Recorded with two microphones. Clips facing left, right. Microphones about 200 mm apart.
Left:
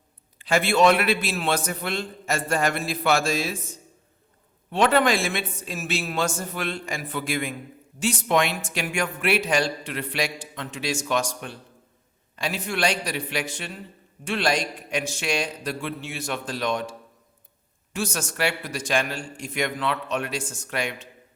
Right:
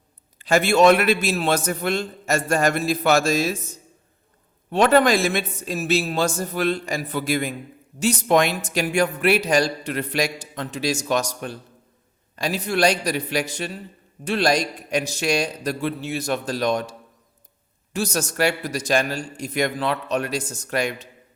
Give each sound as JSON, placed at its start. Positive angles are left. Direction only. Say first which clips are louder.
{"t": 0.3, "sound": "a man's voice", "louder": "right 3 dB", "side_deg": -45}
{"t": 4.7, "sound": "a man's voice", "louder": "right 4 dB", "side_deg": -40}
{"t": 17.9, "sound": "a man's voice", "louder": "right 5 dB", "side_deg": -40}